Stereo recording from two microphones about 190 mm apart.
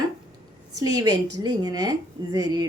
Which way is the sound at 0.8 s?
20° right (ahead or behind).